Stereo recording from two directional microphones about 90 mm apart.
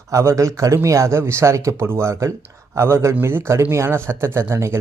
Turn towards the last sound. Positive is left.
turn(degrees=-30)  # may be behind; listen again after turning